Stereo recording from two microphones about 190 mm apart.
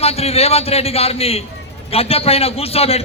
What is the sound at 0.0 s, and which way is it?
Speech, 30° left (ahead or behind).